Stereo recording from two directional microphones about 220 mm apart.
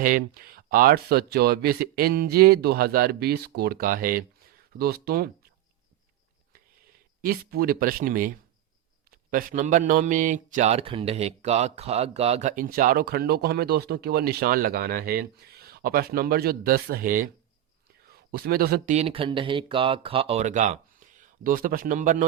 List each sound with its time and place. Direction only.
0.0 s speech: 40° right (ahead or behind)
7.2 s a man's voice: 45° right (ahead or behind)
9.3 s a man's voice: 40° right (ahead or behind)
18.9 s speech: 25° right (ahead or behind)